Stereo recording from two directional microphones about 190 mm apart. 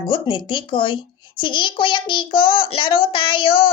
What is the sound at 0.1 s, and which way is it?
A woman's voice, 25° left (ahead or behind).